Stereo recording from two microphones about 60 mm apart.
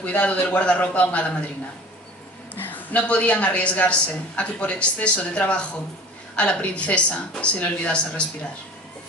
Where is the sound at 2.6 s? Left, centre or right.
Left.